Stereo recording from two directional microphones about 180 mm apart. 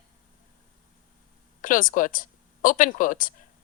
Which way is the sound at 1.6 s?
45° left (ahead or behind).